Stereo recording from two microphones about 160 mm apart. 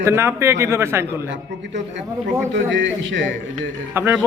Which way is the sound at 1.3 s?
90° right.